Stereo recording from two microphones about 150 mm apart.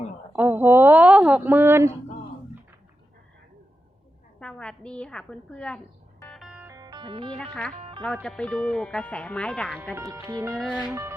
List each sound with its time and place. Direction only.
0.3 s a woman's voice: 10° right (ahead or behind)
4.4 s speech: 5° left (ahead or behind)
6.2 s music: 5° left (ahead or behind)
6.5 s music: 10° right (ahead or behind)
6.7 s music: 25° right (ahead or behind)
7.3 s speech: 5° left (ahead or behind)
7.7 s speech: 45° right (ahead or behind)
8.0 s speech: 5° left (ahead or behind)
9.9 s speech: 20° right (ahead or behind)